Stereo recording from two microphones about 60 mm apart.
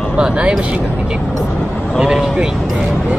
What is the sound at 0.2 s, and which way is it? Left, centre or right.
Speech, centre.